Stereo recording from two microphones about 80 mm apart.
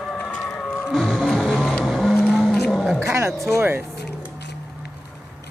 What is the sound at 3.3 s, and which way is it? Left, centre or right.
Speech, centre.